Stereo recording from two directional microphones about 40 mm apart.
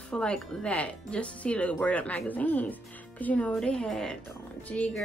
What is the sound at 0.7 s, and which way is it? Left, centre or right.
Speech, left.